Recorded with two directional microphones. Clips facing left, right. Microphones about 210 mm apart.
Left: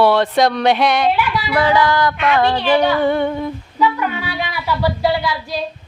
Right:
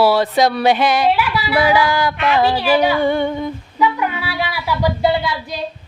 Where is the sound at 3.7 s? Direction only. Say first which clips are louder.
Even; 10° right (ahead or behind).